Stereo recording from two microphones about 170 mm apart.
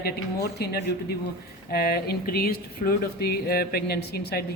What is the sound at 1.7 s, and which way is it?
Speech, 65° left (ahead or behind).